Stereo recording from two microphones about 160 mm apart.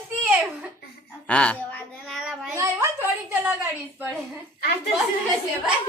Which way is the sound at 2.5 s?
20° right (ahead or behind).